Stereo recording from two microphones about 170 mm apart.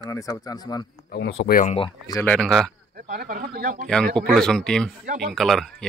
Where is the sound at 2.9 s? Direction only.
55° right (ahead or behind).